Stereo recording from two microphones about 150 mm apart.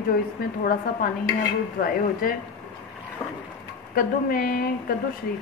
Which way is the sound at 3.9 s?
65° left (ahead or behind).